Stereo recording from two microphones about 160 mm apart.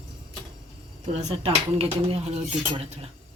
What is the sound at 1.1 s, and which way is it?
Speech, 40° right (ahead or behind).